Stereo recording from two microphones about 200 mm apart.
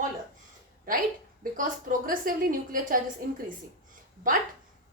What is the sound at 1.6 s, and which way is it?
A woman's voice, 45° right (ahead or behind).